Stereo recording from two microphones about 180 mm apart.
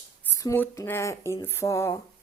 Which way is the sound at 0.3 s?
15° left (ahead or behind).